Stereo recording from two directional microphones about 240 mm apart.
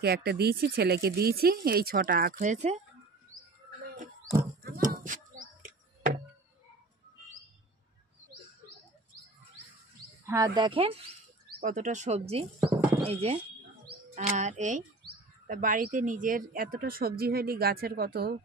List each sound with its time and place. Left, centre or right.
0.0 s speech: right
4.6 s bird: right
10.2 s speech: centre
11.6 s speech: right